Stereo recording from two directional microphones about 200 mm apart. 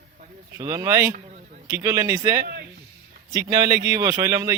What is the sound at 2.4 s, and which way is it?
Speech, 50° right (ahead or behind).